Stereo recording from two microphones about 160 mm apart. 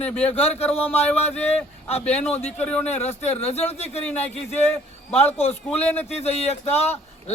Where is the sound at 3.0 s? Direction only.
40° left (ahead or behind).